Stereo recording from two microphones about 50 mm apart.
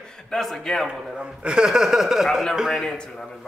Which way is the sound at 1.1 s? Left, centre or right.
Centre.